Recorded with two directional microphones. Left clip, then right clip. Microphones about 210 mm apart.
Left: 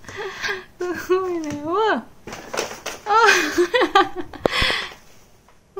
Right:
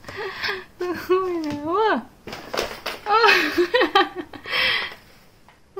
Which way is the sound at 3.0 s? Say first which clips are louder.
Left 1 dB; 5° left (ahead or behind).